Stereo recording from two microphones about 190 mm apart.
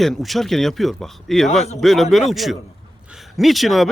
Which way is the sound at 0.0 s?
Centre (ahead or behind).